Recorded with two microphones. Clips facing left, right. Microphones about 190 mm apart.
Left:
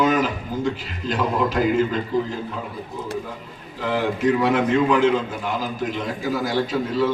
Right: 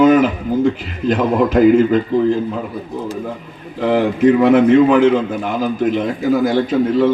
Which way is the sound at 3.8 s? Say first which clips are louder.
Right 8 dB; 55° right (ahead or behind).